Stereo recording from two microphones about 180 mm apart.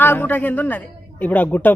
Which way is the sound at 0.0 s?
10° left (ahead or behind).